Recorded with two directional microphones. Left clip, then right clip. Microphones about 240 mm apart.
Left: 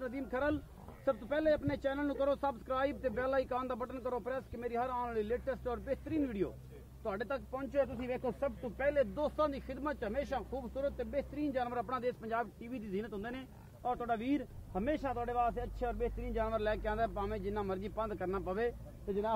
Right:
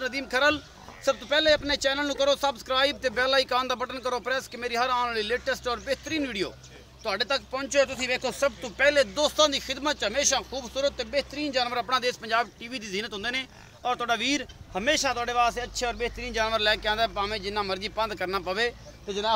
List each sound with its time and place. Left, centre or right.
0.0 s speech: centre
7.8 s speech: right; by 18.7 s centre